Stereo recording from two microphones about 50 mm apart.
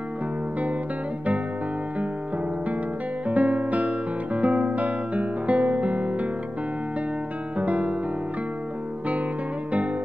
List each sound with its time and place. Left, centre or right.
3.3 s music: right
7.5 s music: right